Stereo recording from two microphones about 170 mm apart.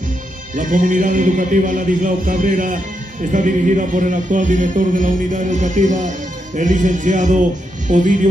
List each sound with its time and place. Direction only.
0.6 s a man's voice: 50° right (ahead or behind)